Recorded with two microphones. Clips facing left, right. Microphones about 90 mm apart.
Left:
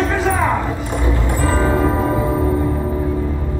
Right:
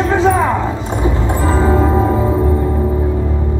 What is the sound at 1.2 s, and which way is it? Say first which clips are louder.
Music: right 2 dB; 20° right (ahead or behind).